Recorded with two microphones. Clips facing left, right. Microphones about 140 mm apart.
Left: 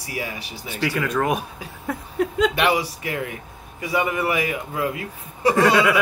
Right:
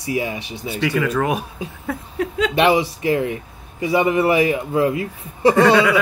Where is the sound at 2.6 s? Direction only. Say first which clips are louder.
Right 5 dB; 25° right (ahead or behind).